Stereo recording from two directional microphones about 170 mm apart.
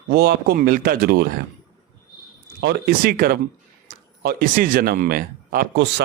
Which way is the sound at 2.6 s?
75° right (ahead or behind).